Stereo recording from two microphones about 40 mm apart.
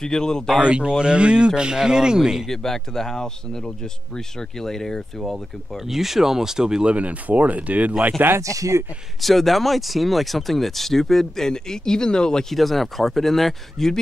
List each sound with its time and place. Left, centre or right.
0.0 s speech: centre
0.6 s speech: right
2.4 s speech: centre
5.9 s speech: centre
6.8 s speech: right
8.2 s speech: right
9.2 s speech: centre
12.5 s speech: centre